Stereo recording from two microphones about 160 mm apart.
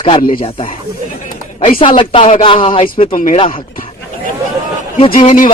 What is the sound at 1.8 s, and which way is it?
Speech, 30° left (ahead or behind).